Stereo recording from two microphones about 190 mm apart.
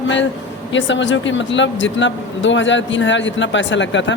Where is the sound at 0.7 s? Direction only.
75° left (ahead or behind).